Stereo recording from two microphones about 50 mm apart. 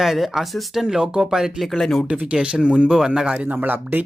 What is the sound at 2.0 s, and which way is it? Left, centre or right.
Speech, right.